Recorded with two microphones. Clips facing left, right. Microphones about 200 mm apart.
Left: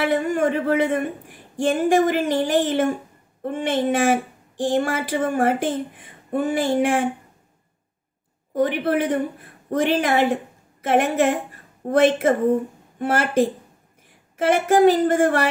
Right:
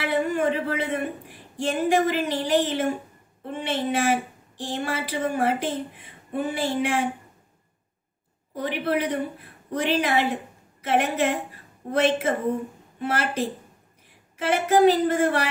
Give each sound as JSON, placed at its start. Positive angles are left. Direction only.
{"t": 0.0, "sound": "speech", "side_deg": 45}
{"t": 8.5, "sound": "a woman's voice", "side_deg": 50}